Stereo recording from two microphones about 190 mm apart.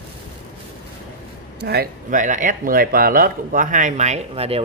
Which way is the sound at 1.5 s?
55° right (ahead or behind).